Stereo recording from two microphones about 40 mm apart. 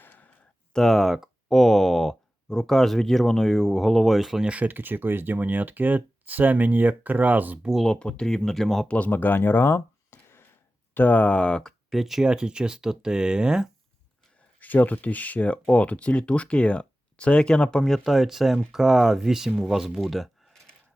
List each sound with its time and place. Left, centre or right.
0.0 s a sound: left
0.7 s speech: centre
4.4 s speech: right
4.7 s speech: right
7.9 s speech: left; by 8.9 s centre
9.0 s speech: left
10.9 s speech: left
11.2 s speech: left
11.9 s speech: centre
12.2 s speech: right
14.6 s speech: left; by 17.9 s centre
17.9 s speech: centre